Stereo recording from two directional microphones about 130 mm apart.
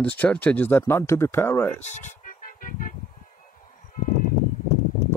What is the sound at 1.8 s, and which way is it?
Music, 65° left (ahead or behind).